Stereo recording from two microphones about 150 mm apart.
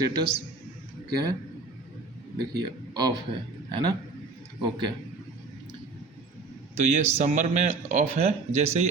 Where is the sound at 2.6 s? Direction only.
25° right (ahead or behind).